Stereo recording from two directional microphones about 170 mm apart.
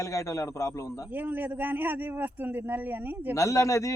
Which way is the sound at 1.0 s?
10° right (ahead or behind).